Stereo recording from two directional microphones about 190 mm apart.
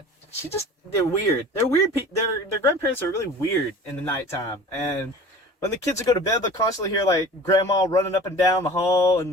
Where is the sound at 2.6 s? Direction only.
15° left (ahead or behind).